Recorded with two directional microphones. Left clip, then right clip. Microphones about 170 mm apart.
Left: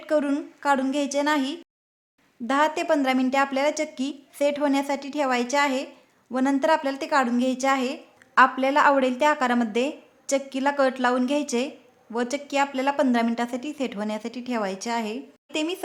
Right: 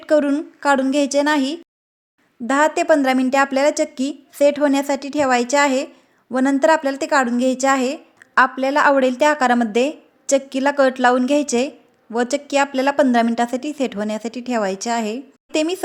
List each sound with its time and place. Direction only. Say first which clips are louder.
0.0 s a woman's voice: right 7 dB; 30° right (ahead or behind)